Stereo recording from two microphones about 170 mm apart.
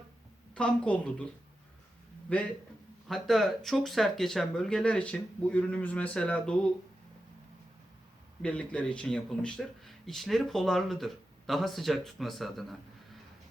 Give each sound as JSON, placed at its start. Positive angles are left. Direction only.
{"t": 0.5, "sound": "a woman's voice", "side_deg": 5}
{"t": 2.3, "sound": "a woman's voice", "side_deg": 10}
{"t": 8.4, "sound": "speech", "side_deg": 5}